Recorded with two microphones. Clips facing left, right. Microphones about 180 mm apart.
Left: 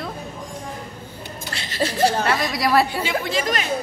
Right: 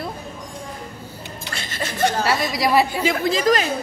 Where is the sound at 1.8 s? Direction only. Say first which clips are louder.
Left 3 dB; 30° left (ahead or behind).